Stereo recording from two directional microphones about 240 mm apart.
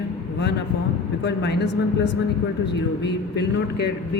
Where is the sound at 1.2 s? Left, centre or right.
Left.